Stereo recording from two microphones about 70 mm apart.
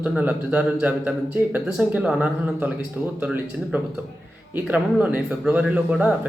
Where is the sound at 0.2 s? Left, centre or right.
Centre.